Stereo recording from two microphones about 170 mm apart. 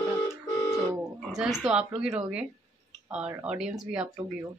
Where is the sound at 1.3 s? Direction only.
Centre (ahead or behind).